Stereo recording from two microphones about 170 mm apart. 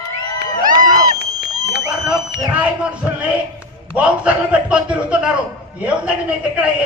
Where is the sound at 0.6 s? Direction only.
50° right (ahead or behind).